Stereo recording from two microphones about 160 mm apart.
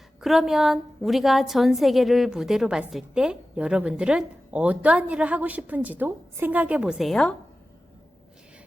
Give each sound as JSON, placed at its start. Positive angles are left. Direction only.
{"t": 0.2, "sound": "a woman's voice", "side_deg": 0}